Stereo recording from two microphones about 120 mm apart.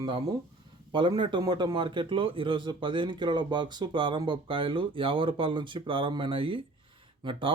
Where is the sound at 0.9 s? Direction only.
40° right (ahead or behind).